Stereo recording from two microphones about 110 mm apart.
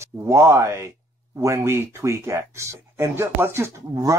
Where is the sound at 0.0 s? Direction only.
25° right (ahead or behind).